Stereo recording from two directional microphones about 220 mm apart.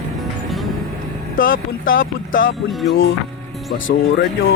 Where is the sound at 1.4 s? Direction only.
60° left (ahead or behind).